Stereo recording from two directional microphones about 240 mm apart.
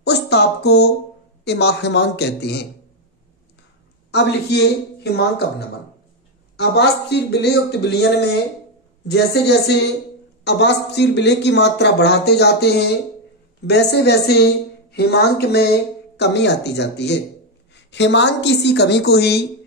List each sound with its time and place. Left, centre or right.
0.0 s speech: left
4.1 s speech: left